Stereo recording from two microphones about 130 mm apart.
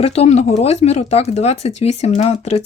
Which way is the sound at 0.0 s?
55° left (ahead or behind).